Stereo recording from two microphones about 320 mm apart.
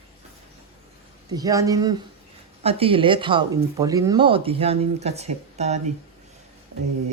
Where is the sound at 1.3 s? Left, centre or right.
Centre.